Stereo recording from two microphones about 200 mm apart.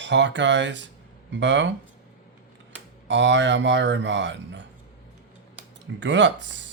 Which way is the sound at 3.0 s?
65° right (ahead or behind).